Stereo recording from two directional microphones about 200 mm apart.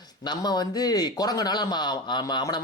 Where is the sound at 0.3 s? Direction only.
20° left (ahead or behind).